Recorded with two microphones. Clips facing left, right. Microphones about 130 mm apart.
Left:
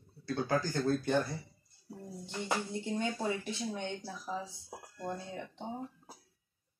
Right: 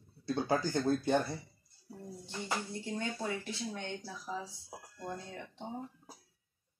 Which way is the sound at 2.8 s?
15° left (ahead or behind).